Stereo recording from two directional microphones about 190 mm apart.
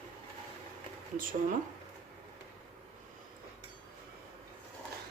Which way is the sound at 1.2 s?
45° right (ahead or behind).